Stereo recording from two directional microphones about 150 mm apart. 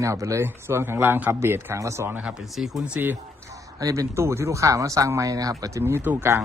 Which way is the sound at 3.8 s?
20° right (ahead or behind).